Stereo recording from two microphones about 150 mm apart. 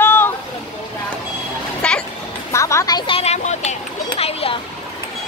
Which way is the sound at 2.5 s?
20° left (ahead or behind).